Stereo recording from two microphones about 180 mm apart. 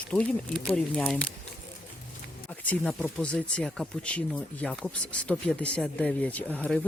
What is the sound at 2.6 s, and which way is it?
Speech, 10° left (ahead or behind).